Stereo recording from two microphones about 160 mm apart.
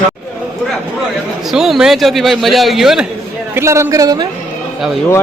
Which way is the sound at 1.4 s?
Centre (ahead or behind).